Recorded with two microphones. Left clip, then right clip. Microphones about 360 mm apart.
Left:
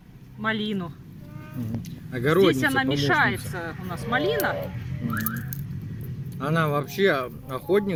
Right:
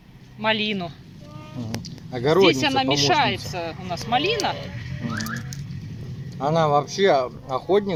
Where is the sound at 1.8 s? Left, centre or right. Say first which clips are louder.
Right 3 dB; centre.